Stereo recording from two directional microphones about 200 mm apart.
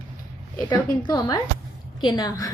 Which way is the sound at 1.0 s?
20° left (ahead or behind).